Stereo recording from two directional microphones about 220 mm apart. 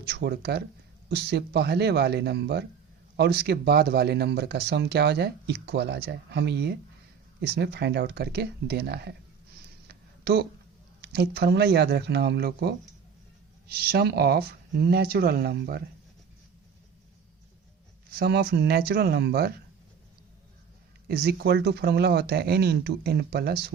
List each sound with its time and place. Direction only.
0.0 s speech: 50° right (ahead or behind)
9.8 s a sound: 45° right (ahead or behind)
11.0 s speech: 50° right (ahead or behind)
18.2 s speech: 45° right (ahead or behind)
21.1 s speech: 45° right (ahead or behind)